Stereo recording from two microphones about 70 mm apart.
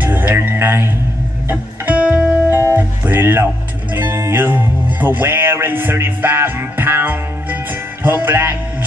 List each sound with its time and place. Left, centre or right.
0.0 s music: right
1.5 s music: right
2.5 s guitar: right
3.9 s music: right